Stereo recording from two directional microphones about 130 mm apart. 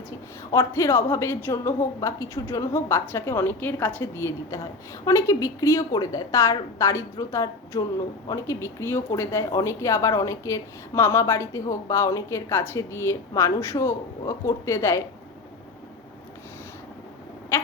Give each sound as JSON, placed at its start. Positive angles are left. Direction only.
{"t": 0.7, "sound": "speech", "side_deg": 20}